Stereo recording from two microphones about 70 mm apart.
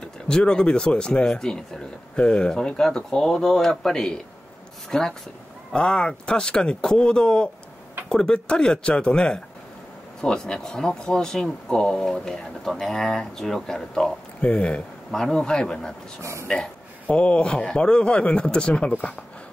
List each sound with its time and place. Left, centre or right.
0.3 s speech: centre
16.2 s speech: right
17.1 s speech: centre